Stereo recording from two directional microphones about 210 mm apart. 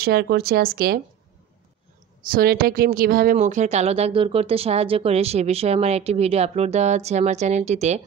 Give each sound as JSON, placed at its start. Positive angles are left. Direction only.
{"t": 0.0, "sound": "speech", "side_deg": -50}
{"t": 2.3, "sound": "speech", "side_deg": -45}